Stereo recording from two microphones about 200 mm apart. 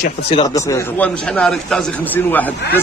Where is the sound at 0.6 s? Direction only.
10° left (ahead or behind).